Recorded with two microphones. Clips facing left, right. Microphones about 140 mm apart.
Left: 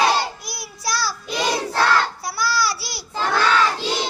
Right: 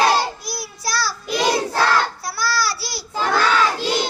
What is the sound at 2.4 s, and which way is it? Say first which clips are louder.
Babbling: even; 15° left (ahead or behind).